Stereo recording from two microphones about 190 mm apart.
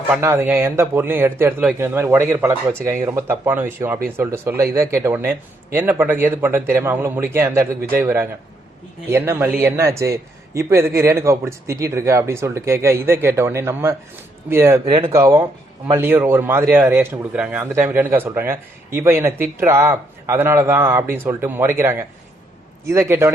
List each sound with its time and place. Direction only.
0.1 s a man's voice: 15° right (ahead or behind)
14.8 s speech: 25° right (ahead or behind)
15.2 s a man's voice: 15° right (ahead or behind)